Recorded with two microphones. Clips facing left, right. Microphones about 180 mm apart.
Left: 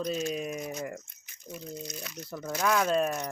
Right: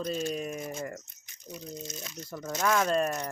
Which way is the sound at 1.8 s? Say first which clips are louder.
Left 1 dB; 25° right (ahead or behind).